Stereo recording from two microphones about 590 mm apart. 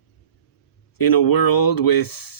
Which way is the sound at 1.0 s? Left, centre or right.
Left.